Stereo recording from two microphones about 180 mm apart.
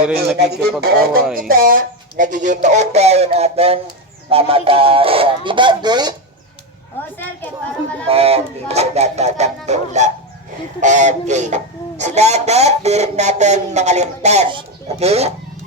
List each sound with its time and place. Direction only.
0.3 s speech: 65° right (ahead or behind); by 6.1 s 25° right (ahead or behind)
7.0 s a woman's voice: 10° left (ahead or behind)
8.0 s speech: 35° right (ahead or behind)